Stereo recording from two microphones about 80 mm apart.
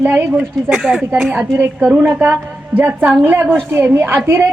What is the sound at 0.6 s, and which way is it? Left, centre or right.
Speech, centre.